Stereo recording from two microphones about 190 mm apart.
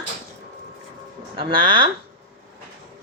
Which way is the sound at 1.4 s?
25° right (ahead or behind).